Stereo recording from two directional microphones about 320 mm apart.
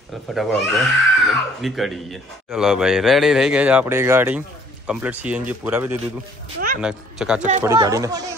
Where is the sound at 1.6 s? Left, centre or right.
Centre.